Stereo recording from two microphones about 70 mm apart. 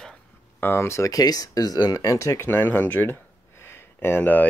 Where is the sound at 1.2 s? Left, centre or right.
Left.